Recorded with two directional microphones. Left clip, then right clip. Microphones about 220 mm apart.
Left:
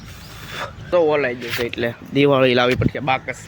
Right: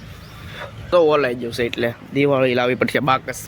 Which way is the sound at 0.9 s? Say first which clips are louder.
Right 2 dB; 15° right (ahead or behind).